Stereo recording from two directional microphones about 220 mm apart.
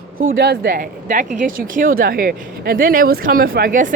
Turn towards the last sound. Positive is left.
turn(degrees=-40)  # may be behind; listen again after turning